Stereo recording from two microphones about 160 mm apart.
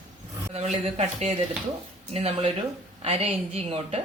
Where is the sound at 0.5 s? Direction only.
40° right (ahead or behind).